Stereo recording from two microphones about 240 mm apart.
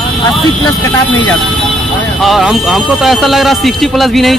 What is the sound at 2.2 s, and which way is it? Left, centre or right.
Speech, centre.